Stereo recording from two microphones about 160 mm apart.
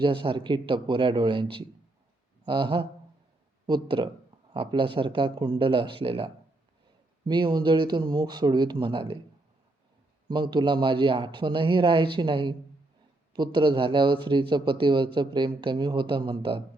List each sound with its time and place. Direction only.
0.0 s a man's voice: 30° right (ahead or behind)
2.4 s a sound: 30° right (ahead or behind)
3.7 s a man's voice: 30° right (ahead or behind)
10.2 s a man's voice: 25° right (ahead or behind)